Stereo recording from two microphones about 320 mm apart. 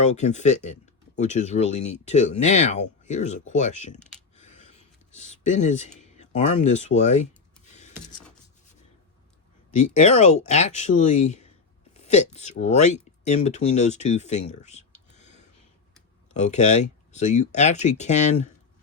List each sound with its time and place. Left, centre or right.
0.0 s speech: left
4.4 s a sound: left
6.1 s speech: left
9.7 s speech: left